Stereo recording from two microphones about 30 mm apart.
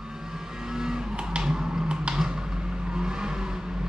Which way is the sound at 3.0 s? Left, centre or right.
Right.